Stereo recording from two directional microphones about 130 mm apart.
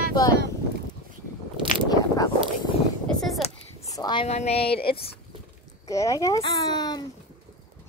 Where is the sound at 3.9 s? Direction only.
30° left (ahead or behind).